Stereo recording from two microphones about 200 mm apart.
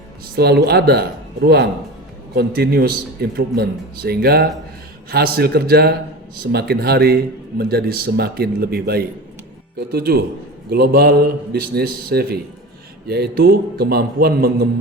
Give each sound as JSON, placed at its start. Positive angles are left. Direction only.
{"t": 0.3, "sound": "a man's voice", "side_deg": -50}
{"t": 2.3, "sound": "a man's voice", "side_deg": -50}